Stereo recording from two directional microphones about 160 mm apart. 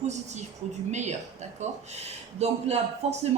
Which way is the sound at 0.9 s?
45° right (ahead or behind).